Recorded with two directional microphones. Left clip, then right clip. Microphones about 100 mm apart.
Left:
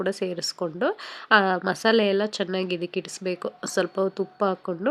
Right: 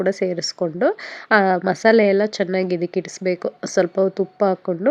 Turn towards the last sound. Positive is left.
turn(degrees=-35)  # may be behind; listen again after turning